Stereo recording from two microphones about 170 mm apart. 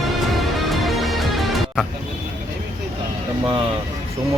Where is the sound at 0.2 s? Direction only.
Centre (ahead or behind).